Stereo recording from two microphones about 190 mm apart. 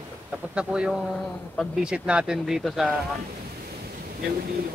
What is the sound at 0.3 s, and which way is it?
Speech, 5° right (ahead or behind).